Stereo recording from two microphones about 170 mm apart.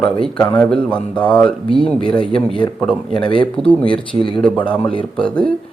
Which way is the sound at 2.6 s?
25° left (ahead or behind).